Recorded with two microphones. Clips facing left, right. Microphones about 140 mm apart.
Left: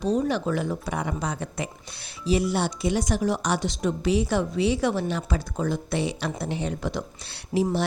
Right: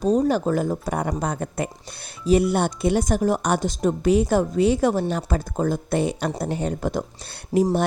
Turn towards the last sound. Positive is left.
turn(degrees=-50)  # may be behind; listen again after turning